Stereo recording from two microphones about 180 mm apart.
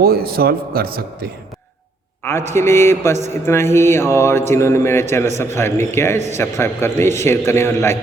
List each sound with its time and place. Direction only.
0.0 s a man's voice: 60° right (ahead or behind)
2.2 s speech: 15° left (ahead or behind)